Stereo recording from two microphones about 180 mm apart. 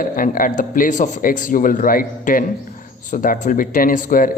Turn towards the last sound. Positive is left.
turn(degrees=50)  # may be behind; listen again after turning